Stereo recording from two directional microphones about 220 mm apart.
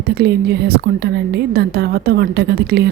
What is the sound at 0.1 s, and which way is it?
A woman's voice, 50° right (ahead or behind).